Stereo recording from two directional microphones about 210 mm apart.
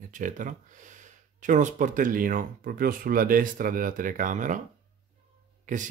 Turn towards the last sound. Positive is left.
turn(degrees=-35)  # may be behind; listen again after turning